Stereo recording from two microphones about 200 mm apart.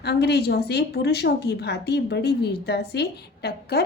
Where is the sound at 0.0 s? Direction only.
55° left (ahead or behind).